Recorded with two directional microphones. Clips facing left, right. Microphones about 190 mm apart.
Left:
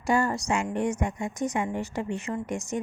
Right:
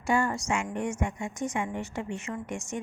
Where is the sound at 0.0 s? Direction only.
40° left (ahead or behind).